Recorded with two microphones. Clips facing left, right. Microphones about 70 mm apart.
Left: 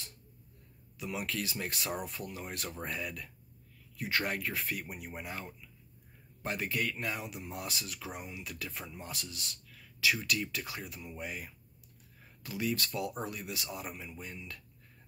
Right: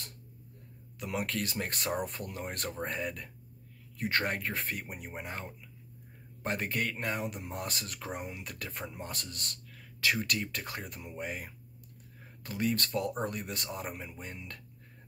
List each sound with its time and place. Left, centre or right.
0.9 s speech: right
2.7 s speech: right